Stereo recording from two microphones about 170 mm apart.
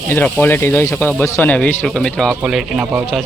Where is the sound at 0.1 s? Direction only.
10° left (ahead or behind).